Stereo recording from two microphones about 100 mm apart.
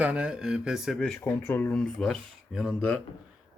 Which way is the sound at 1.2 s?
20° left (ahead or behind).